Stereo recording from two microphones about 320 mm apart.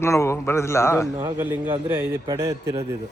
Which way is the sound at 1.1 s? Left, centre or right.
Centre.